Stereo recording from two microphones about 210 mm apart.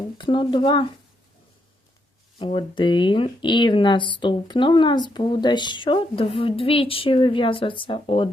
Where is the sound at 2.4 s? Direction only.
25° left (ahead or behind).